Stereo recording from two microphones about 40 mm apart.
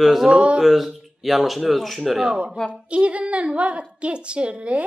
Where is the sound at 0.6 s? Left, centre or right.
Centre.